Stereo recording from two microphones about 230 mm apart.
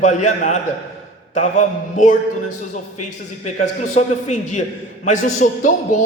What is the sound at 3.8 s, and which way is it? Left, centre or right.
A man's voice, left.